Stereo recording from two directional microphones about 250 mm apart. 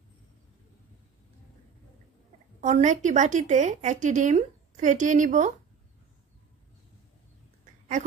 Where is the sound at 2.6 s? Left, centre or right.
Right.